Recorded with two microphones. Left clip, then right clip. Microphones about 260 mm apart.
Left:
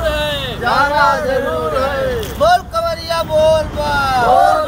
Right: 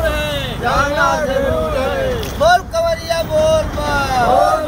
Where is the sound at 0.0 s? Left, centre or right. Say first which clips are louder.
Left 1 dB; centre.